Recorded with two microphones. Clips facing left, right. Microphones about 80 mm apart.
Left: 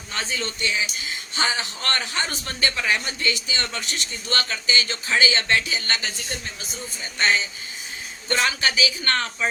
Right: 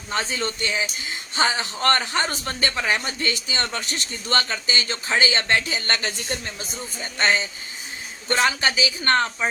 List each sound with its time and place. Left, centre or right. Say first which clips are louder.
0.1 s a man's voice: right 3 dB; right